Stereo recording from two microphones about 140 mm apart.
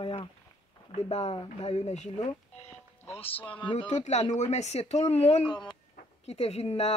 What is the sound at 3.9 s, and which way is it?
Speech, 55° left (ahead or behind).